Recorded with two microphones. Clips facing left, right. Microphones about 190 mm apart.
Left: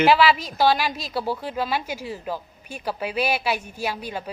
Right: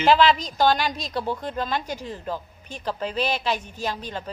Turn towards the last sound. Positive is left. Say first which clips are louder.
# left 1 dB
turn(degrees=10)  # may be behind; listen again after turning